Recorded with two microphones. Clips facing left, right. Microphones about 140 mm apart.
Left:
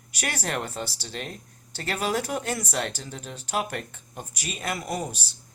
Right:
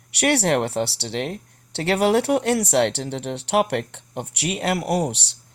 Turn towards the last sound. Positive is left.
turn(degrees=-75)  # may be behind; listen again after turning